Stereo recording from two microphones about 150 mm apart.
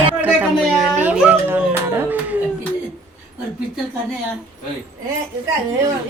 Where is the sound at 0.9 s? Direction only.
10° right (ahead or behind).